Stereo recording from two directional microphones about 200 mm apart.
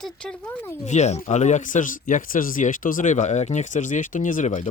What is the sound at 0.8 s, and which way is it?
Speech, 35° left (ahead or behind).